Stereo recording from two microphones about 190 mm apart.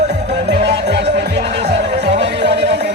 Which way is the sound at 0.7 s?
65° right (ahead or behind).